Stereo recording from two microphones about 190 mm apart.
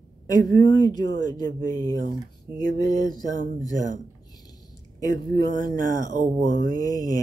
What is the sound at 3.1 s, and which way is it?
Speech, 20° left (ahead or behind).